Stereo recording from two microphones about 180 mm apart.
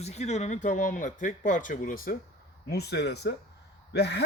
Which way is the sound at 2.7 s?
65° left (ahead or behind).